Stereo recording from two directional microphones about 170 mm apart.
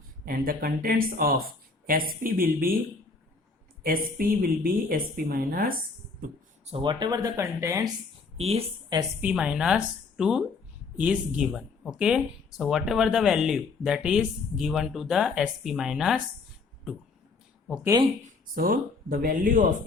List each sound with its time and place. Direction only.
0.3 s a woman's voice: 55° right (ahead or behind)
3.8 s a woman's voice: 55° right (ahead or behind)
6.7 s speech: 30° right (ahead or behind)
8.4 s speech: 35° right (ahead or behind)
8.9 s speech: 25° right (ahead or behind)
9.2 s speech: 5° right (ahead or behind)
18.5 s a woman's voice: 55° right (ahead or behind)